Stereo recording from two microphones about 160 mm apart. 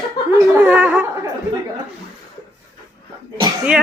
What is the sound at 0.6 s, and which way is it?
Speech, 10° right (ahead or behind).